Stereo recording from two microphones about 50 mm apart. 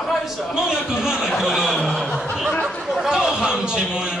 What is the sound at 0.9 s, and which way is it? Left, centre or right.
Speech, centre.